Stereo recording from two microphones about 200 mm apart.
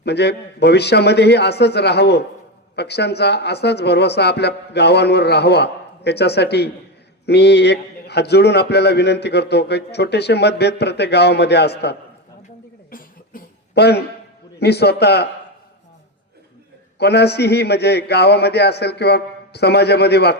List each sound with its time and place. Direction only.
0.0 s a man's voice: 55° left (ahead or behind)
12.9 s cough: 45° left (ahead or behind)
14.6 s a man's voice: 55° left (ahead or behind)
17.0 s a man's voice: 55° left (ahead or behind)